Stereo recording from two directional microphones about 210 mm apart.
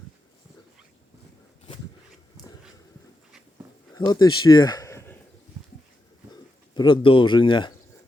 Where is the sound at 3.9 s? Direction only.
20° left (ahead or behind).